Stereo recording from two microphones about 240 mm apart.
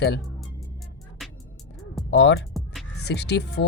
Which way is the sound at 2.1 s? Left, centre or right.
Left.